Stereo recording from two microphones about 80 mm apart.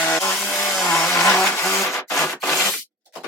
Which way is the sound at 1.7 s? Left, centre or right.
Left.